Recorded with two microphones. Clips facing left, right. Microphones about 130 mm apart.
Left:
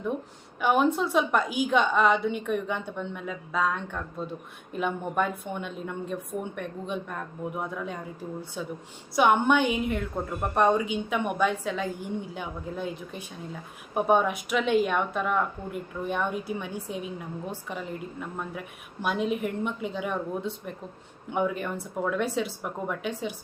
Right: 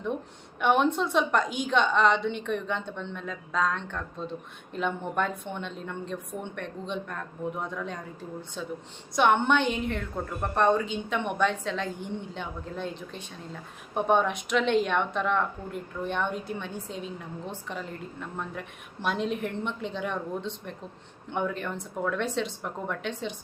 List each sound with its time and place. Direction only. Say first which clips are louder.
0.6 s a woman's voice: even; 5° left (ahead or behind)